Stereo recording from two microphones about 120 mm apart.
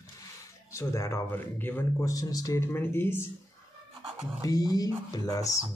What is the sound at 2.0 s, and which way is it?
Speech, 30° left (ahead or behind).